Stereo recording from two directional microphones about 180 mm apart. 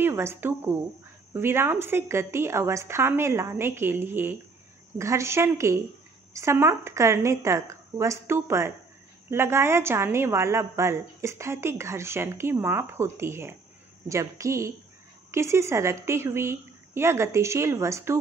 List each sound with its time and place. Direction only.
0.0 s a woman's voice: 15° right (ahead or behind)